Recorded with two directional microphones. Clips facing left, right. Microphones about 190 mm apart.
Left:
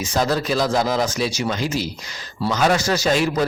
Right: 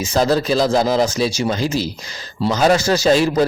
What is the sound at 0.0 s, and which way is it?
A man's voice, 30° right (ahead or behind).